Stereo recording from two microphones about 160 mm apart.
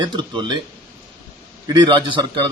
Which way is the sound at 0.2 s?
30° right (ahead or behind).